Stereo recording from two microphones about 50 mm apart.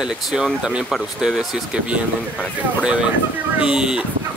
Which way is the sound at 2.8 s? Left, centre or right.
Right.